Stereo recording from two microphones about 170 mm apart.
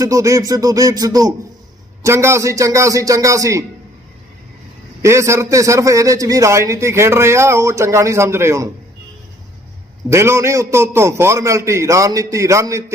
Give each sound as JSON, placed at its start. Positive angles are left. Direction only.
{"t": 0.0, "sound": "a man's voice", "side_deg": -20}
{"t": 5.0, "sound": "a man's voice", "side_deg": -15}
{"t": 10.1, "sound": "a man's voice", "side_deg": -15}